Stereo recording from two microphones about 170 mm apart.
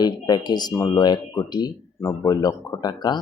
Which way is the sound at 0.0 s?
25° left (ahead or behind).